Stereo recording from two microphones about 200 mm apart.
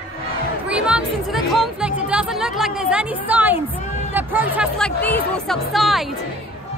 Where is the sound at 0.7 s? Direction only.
5° right (ahead or behind).